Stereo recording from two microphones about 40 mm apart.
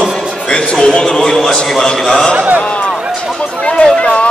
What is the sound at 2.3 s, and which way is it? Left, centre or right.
Speech, right.